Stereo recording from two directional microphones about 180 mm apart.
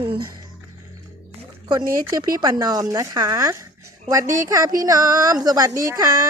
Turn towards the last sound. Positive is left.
turn(degrees=-20)  # may be behind; listen again after turning